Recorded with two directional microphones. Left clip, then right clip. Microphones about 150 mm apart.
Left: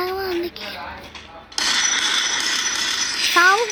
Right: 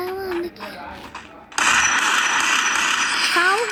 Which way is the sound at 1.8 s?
Centre (ahead or behind).